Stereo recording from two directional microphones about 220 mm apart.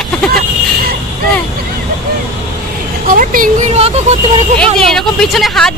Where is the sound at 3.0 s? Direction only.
40° right (ahead or behind).